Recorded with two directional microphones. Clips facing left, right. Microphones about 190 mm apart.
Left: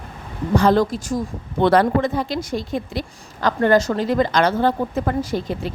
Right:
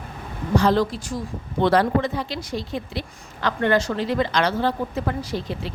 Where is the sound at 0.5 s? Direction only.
50° left (ahead or behind).